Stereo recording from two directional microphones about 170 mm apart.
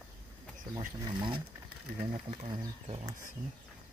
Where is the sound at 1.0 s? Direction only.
30° right (ahead or behind).